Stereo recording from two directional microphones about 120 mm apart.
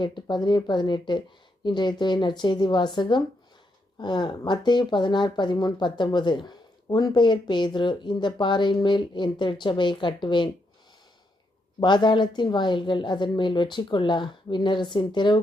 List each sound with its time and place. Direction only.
0.0 s speech: 40° left (ahead or behind)
11.8 s speech: 40° left (ahead or behind)